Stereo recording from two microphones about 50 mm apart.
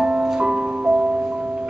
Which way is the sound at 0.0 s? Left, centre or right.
Right.